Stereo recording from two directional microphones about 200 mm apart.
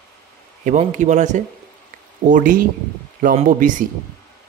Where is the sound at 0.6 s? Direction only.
40° right (ahead or behind).